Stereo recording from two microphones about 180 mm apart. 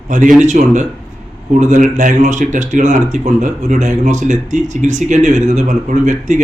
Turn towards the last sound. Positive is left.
turn(degrees=-45)  # may be behind; listen again after turning